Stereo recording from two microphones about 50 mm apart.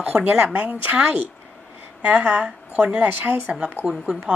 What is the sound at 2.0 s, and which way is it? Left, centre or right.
A woman's voice, right.